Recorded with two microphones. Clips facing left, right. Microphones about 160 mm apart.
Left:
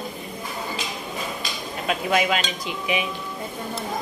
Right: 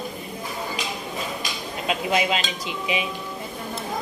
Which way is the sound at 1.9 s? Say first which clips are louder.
Left 1 dB; 20° right (ahead or behind).